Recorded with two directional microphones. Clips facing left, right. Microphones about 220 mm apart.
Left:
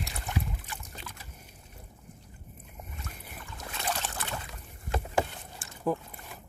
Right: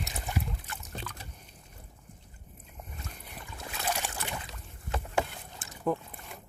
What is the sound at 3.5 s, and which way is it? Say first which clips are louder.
Boat: right 1 dB; 5° right (ahead or behind).